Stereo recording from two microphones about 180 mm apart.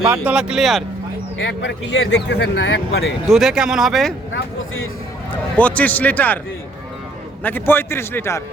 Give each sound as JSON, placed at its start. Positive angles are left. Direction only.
{"t": 0.1, "sound": "speech", "side_deg": -5}
{"t": 1.4, "sound": "a man's voice", "side_deg": 90}
{"t": 3.2, "sound": "speech", "side_deg": 0}
{"t": 5.5, "sound": "a man's voice", "side_deg": 10}
{"t": 7.4, "sound": "a man's voice", "side_deg": 10}